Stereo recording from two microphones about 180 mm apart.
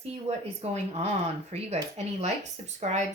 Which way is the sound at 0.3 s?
35° right (ahead or behind).